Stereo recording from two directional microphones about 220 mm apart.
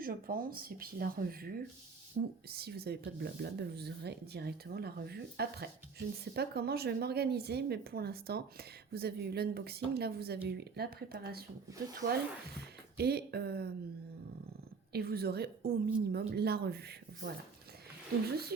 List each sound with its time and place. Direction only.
0.0 s speech: 40° right (ahead or behind)
12.5 s speech: 45° right (ahead or behind)
14.9 s speech: 45° right (ahead or behind)